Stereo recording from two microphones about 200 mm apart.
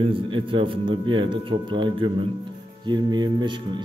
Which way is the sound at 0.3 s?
25° right (ahead or behind).